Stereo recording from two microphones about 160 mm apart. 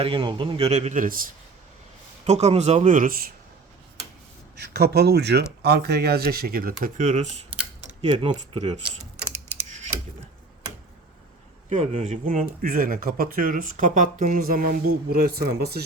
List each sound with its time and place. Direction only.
0.0 s speech: 30° right (ahead or behind); by 1.2 s 55° right (ahead or behind)
2.2 s speech: 45° right (ahead or behind); by 3.3 s 65° right (ahead or behind)
4.5 s speech: 90° right; by 7.3 s 50° right (ahead or behind)
7.9 s a sound: 45° right (ahead or behind)
11.8 s speech: 40° right (ahead or behind); by 15.8 s 75° right (ahead or behind)